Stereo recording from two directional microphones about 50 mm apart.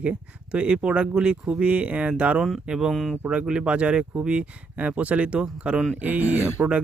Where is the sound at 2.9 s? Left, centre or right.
Centre.